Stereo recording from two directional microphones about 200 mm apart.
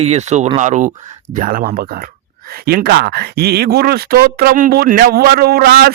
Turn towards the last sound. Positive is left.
turn(degrees=-50)  # may be behind; listen again after turning